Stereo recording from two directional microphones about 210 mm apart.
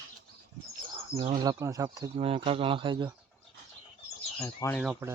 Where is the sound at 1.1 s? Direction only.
30° right (ahead or behind).